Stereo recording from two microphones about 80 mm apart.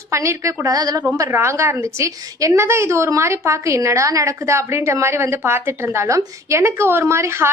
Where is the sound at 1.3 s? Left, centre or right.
Right.